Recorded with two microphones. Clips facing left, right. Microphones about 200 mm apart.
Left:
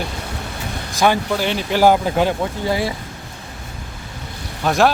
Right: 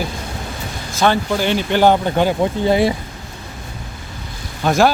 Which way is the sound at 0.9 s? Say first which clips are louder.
Right 1 dB; 15° left (ahead or behind).